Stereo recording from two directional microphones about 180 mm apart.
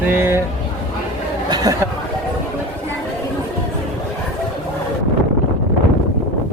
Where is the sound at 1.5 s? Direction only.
20° right (ahead or behind).